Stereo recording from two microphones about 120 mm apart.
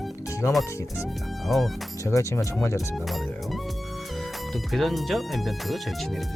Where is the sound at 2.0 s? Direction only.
25° left (ahead or behind).